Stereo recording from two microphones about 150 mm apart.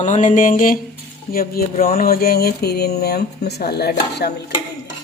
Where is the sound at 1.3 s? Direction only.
80° left.